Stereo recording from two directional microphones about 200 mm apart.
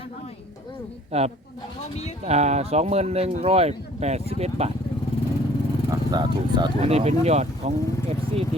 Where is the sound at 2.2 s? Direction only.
35° right (ahead or behind).